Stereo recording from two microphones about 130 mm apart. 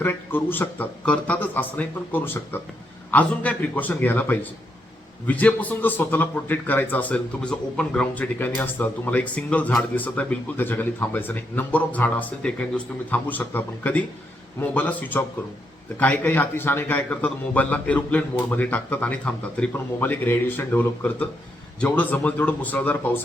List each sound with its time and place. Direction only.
0.0 s a man's voice: 15° left (ahead or behind)